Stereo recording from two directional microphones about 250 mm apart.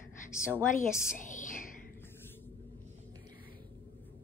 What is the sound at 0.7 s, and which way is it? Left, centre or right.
Speech, left.